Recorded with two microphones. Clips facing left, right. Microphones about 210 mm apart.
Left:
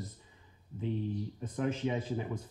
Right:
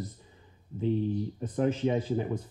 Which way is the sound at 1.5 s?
40° right (ahead or behind).